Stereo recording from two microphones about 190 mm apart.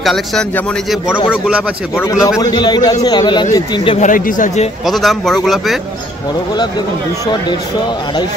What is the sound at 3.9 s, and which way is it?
Speech, 45° left (ahead or behind).